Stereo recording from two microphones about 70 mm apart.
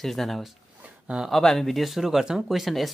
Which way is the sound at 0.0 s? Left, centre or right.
Centre.